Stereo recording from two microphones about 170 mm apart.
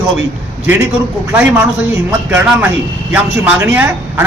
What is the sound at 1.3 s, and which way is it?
Speech, 10° right (ahead or behind).